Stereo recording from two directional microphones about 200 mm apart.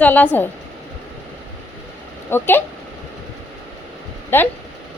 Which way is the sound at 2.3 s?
10° left (ahead or behind).